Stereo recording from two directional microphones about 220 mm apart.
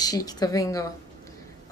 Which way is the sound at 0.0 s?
15° left (ahead or behind).